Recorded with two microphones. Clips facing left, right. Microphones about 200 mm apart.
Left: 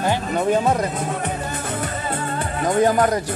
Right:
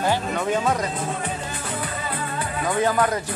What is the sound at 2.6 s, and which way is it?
Speech, 40° left (ahead or behind).